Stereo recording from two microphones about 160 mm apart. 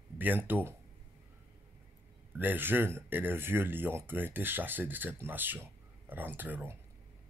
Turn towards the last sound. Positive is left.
turn(degrees=-10)  # may be behind; listen again after turning